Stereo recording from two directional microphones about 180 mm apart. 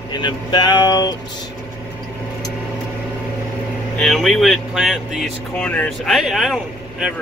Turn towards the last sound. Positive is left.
turn(degrees=-5)  # may be behind; listen again after turning